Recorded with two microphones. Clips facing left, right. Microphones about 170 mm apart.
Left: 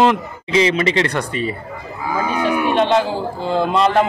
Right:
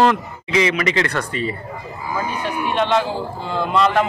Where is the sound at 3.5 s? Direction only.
30° left (ahead or behind).